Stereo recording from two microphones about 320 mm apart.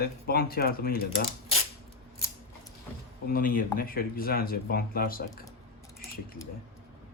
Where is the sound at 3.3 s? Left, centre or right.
Left.